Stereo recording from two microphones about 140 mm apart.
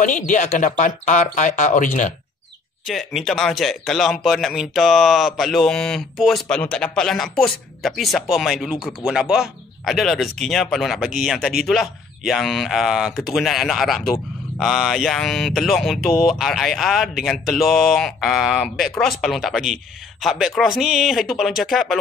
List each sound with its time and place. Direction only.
0.0 s speech: 65° left (ahead or behind)
2.9 s speech: centre (ahead or behind)